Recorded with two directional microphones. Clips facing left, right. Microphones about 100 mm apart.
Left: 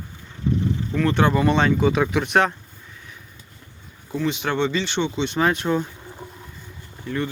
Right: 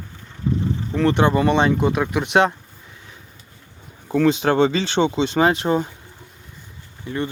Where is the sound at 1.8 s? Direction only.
5° right (ahead or behind).